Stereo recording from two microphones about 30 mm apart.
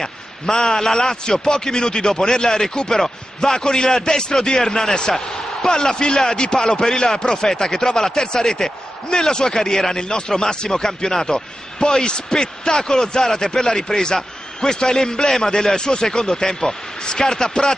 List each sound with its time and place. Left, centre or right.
0.0 s speech: centre
4.6 s a man's voice: centre
5.1 s basketball bounce: centre
5.8 s a man's voice: left